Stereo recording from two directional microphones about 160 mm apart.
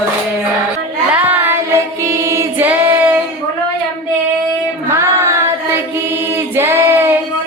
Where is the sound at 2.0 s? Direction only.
20° right (ahead or behind).